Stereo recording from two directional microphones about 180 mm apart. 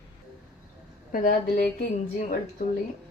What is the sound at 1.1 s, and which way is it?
Speech, 45° left (ahead or behind).